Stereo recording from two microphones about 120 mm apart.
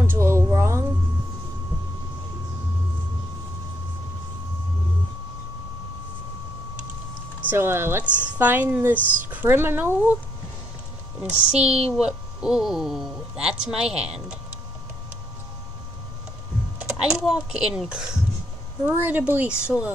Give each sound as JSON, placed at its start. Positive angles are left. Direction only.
{"t": 0.0, "sound": "a sound", "side_deg": -20}
{"t": 7.4, "sound": "speech", "side_deg": -20}
{"t": 11.1, "sound": "speech", "side_deg": -10}
{"t": 17.0, "sound": "speech", "side_deg": -5}